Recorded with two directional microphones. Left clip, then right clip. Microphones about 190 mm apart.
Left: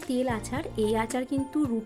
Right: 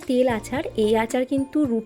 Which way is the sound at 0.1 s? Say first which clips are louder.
Right 8 dB; 15° right (ahead or behind).